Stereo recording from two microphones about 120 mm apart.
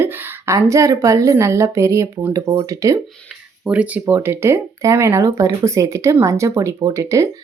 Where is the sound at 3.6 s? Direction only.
10° right (ahead or behind).